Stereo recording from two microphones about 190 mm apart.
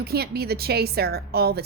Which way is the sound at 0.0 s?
55° right (ahead or behind).